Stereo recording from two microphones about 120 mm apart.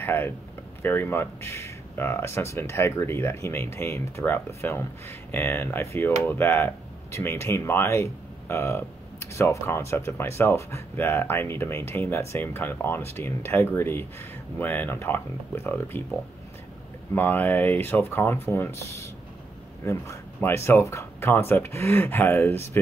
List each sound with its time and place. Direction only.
0.0 s speech: 20° left (ahead or behind)
17.1 s speech: 15° left (ahead or behind)